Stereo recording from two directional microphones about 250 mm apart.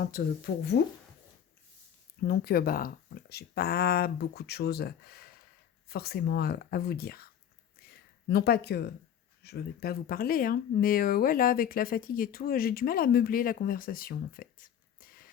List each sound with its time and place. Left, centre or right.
0.0 s speech: left
2.2 s speech: left
7.8 s a sound: left
8.3 s speech: left